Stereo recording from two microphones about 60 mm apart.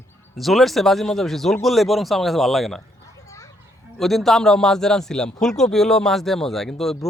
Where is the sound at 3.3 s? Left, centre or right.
Left.